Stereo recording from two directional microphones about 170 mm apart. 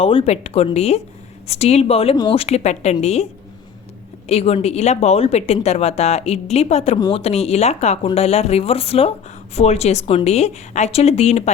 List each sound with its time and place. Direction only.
0.0 s a woman's voice: 35° left (ahead or behind)
4.3 s a woman's voice: 35° left (ahead or behind)